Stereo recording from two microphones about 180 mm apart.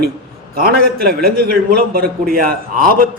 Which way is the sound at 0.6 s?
55° right (ahead or behind).